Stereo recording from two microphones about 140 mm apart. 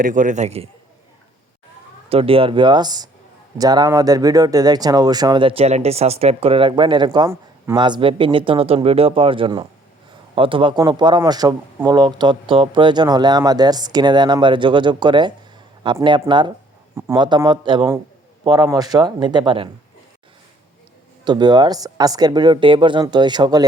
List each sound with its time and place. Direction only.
0.0 s a man's voice: 65° right (ahead or behind); by 0.7 s 50° right (ahead or behind)
2.0 s speech: 40° right (ahead or behind)
17.2 s speech: 30° right (ahead or behind)
21.2 s speech: 30° right (ahead or behind)